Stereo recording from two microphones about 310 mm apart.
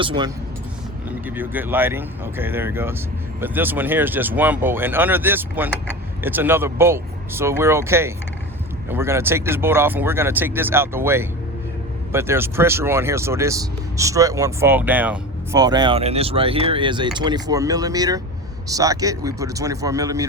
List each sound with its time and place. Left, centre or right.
0.0 s speech: centre
1.4 s speech: centre